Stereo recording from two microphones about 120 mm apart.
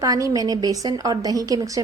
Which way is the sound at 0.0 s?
30° right (ahead or behind).